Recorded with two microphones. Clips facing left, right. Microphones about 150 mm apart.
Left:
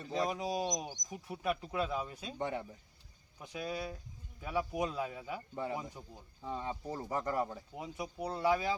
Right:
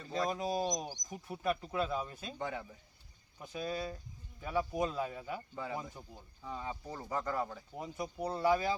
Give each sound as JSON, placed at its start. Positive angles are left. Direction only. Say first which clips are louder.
{"t": 0.1, "sound": "speech", "louder": "even", "side_deg": 10}
{"t": 1.1, "sound": "speech", "louder": "right 1 dB", "side_deg": 5}
{"t": 2.4, "sound": "speech", "louder": "left 3 dB", "side_deg": 25}
{"t": 3.6, "sound": "speech", "louder": "right 1 dB", "side_deg": 10}
{"t": 6.4, "sound": "speech", "louder": "left 3 dB", "side_deg": 25}
{"t": 7.7, "sound": "speech", "louder": "right 1 dB", "side_deg": 5}